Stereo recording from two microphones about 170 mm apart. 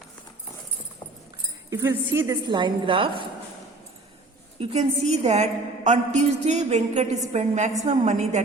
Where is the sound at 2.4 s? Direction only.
25° right (ahead or behind).